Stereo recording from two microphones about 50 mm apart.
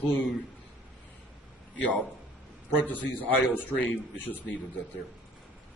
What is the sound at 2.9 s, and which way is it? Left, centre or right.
Speech, left.